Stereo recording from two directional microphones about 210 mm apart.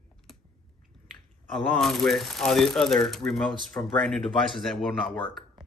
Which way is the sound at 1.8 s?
Centre (ahead or behind).